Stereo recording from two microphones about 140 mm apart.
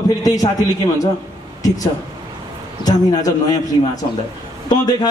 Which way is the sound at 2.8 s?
25° left (ahead or behind).